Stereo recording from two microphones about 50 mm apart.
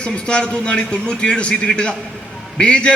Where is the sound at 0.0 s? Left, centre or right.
Left.